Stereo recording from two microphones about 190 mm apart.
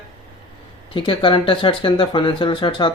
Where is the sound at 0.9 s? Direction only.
25° left (ahead or behind).